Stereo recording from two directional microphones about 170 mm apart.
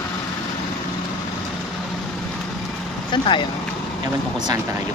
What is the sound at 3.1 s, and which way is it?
Speech, 30° left (ahead or behind).